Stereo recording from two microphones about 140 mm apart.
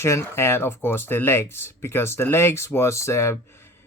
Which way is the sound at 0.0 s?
20° left (ahead or behind).